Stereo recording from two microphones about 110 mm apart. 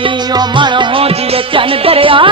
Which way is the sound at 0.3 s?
45° right (ahead or behind).